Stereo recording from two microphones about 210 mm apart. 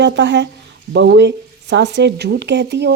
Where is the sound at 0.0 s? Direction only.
60° right (ahead or behind).